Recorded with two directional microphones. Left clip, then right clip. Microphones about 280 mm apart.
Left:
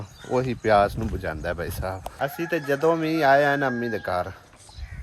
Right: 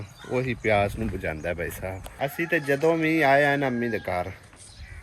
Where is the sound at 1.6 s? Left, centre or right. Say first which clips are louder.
Left 1 dB; left.